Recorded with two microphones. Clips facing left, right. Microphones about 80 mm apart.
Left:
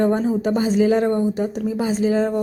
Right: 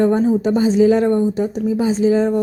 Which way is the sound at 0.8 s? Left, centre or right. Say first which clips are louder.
Right 4 dB; left.